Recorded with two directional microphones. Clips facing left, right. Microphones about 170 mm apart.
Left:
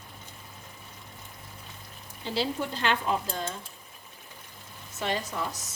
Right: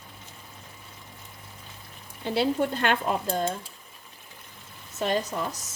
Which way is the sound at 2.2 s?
55° right (ahead or behind).